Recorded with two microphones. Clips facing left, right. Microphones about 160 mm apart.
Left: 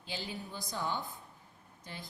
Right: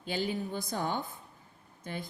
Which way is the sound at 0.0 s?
50° right (ahead or behind).